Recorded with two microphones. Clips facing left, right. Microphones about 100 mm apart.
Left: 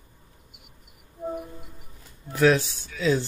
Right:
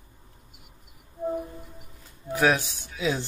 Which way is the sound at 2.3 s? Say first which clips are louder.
Left 3 dB; 15° right (ahead or behind).